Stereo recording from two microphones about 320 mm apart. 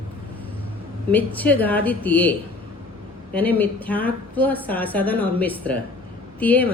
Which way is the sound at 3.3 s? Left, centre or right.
Centre.